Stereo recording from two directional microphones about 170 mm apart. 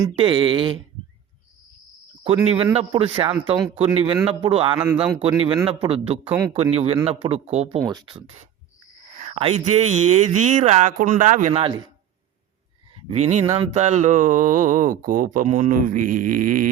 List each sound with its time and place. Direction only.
0.2 s speech: 30° right (ahead or behind)
2.2 s speech: 35° right (ahead or behind)
7.9 s speech: 25° right (ahead or behind)
9.1 s speech: 40° right (ahead or behind)
12.9 s speech: 40° right (ahead or behind); by 16.6 s 55° right (ahead or behind)